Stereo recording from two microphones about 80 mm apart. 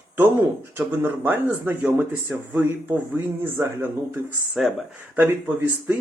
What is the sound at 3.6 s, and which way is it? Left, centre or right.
Speech, right.